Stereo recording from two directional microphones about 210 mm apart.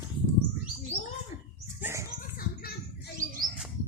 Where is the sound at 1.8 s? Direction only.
15° right (ahead or behind).